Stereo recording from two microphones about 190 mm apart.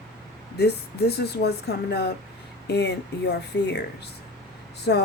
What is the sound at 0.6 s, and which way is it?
A woman's voice, 60° left (ahead or behind).